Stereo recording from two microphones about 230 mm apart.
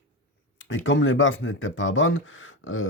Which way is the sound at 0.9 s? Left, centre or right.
Left.